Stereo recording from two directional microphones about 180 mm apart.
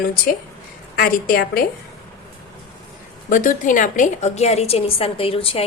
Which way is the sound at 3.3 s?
45° left (ahead or behind).